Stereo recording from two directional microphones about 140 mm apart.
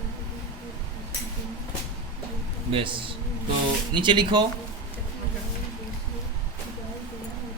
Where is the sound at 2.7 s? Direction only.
40° right (ahead or behind).